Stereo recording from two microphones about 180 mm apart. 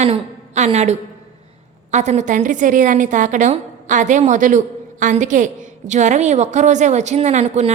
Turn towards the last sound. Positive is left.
turn(degrees=-40)  # may be behind; listen again after turning